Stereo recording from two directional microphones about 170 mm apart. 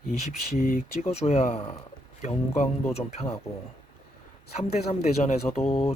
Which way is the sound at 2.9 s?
40° left (ahead or behind).